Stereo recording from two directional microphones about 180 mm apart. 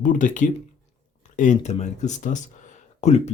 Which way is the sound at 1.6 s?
40° left (ahead or behind).